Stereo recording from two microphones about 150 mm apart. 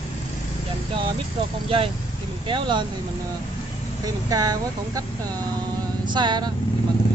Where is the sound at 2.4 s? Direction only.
30° right (ahead or behind).